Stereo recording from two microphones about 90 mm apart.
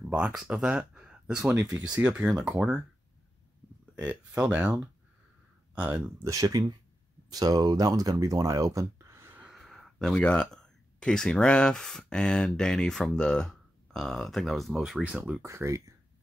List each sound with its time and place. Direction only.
0.0 s speech: 10° right (ahead or behind)
3.9 s speech: 15° right (ahead or behind)
5.8 s speech: 20° right (ahead or behind)
6.2 s speech: 40° right (ahead or behind)
9.4 s speech: centre (ahead or behind)
15.4 s speech: 35° right (ahead or behind)